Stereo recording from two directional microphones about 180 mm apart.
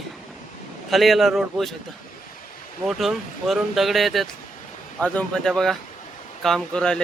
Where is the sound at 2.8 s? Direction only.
Centre (ahead or behind).